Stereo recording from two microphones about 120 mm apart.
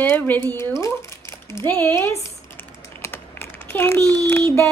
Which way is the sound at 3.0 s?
20° left (ahead or behind).